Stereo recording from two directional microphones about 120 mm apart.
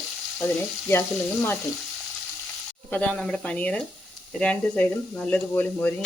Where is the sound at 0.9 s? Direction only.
20° left (ahead or behind).